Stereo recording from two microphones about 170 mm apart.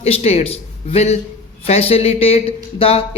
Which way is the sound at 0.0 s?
40° left (ahead or behind).